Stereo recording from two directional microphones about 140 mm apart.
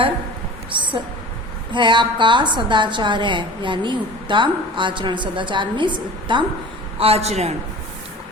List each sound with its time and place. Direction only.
0.7 s a woman's voice: 35° right (ahead or behind)
7.0 s a man's voice: 45° right (ahead or behind)